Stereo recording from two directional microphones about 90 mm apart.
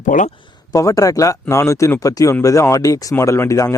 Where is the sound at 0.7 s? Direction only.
40° left (ahead or behind).